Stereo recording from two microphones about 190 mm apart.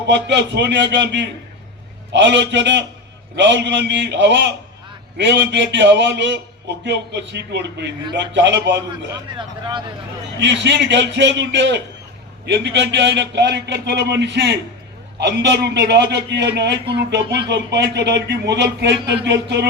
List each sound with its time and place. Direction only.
0.1 s a man's voice: 65° right (ahead or behind)
9.4 s speech: 25° right (ahead or behind)
10.4 s a man's voice: 65° right (ahead or behind)